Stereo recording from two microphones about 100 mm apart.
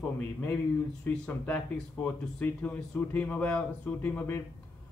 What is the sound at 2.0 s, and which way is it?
Speech, 15° left (ahead or behind).